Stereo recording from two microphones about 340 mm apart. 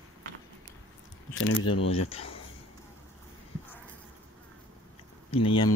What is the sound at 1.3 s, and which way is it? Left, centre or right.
Speech, left.